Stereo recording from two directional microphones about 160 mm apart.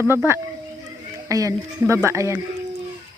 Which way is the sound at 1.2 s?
20° right (ahead or behind).